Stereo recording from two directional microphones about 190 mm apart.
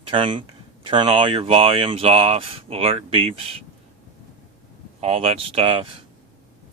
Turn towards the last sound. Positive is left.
turn(degrees=-30)  # may be behind; listen again after turning